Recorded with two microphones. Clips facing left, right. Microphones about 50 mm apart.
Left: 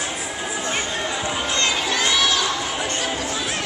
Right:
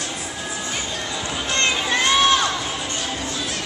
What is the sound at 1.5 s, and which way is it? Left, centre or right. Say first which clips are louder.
Crowd: right 3 dB; right.